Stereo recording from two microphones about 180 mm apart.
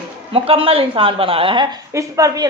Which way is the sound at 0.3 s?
30° right (ahead or behind).